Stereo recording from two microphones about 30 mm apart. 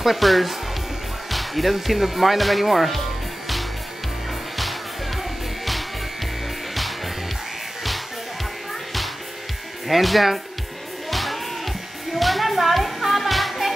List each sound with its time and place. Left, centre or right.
0.0 s speech: centre
4.6 s music: centre
9.8 s speech: centre
11.1 s music: centre